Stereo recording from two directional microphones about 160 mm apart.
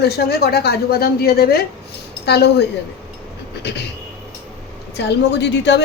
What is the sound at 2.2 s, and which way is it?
Speech, 90° left.